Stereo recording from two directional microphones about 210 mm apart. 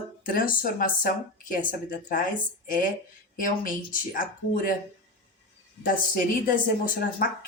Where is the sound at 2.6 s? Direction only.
40° left (ahead or behind).